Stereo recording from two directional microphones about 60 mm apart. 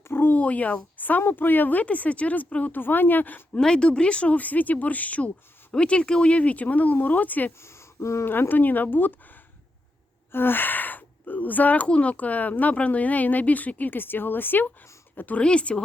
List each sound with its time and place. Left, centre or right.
0.0 s a sound: left
0.3 s speech: left
3.6 s speech: centre
7.6 s speech: left
8.3 s speech: left
15.4 s speech: centre